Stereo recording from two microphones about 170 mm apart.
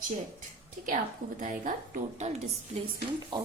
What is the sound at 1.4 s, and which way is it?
Speech, 50° right (ahead or behind).